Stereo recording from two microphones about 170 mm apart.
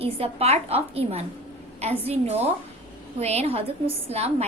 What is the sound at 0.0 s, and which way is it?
A woman's voice, 35° right (ahead or behind).